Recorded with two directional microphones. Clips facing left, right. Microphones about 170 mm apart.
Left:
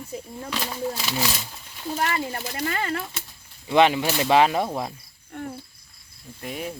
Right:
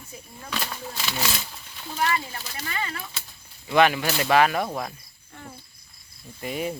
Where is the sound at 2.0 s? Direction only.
45° left (ahead or behind).